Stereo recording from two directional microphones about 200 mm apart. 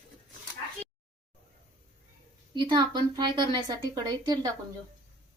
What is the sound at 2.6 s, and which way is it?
A woman's voice, 20° right (ahead or behind).